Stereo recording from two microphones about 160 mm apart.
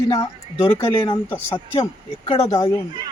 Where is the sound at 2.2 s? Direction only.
40° left (ahead or behind).